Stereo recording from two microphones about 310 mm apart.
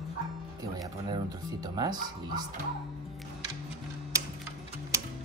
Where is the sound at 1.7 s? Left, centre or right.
Centre.